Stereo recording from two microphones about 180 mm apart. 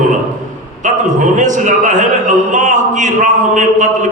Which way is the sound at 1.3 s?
45° right (ahead or behind).